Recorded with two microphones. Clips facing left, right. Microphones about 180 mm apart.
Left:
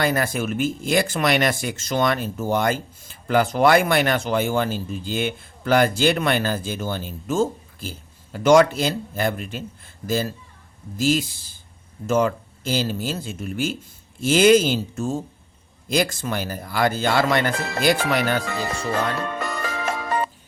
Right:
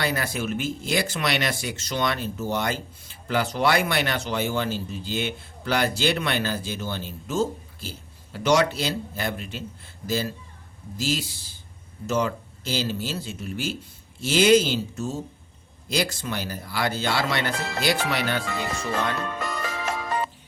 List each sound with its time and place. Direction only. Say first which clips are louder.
0.0 s speech: left 5 dB; 50° left (ahead or behind)
19.2 s music: left 3 dB; 55° left (ahead or behind)